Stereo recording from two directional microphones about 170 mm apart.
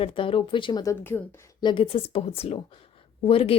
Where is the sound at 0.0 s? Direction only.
30° left (ahead or behind); by 1.2 s 15° left (ahead or behind).